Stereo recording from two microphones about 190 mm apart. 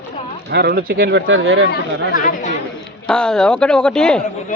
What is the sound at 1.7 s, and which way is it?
Speech, 45° left (ahead or behind).